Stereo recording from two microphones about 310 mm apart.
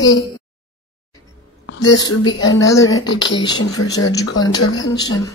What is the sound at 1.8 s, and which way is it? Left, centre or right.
Speech, centre.